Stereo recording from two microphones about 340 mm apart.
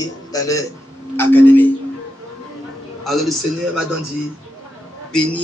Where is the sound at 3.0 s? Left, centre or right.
Centre.